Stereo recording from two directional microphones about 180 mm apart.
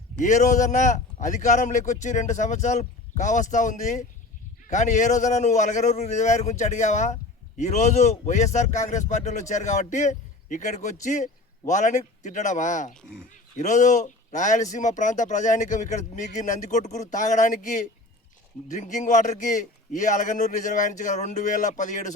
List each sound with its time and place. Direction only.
0.2 s a man's voice: 45° left (ahead or behind)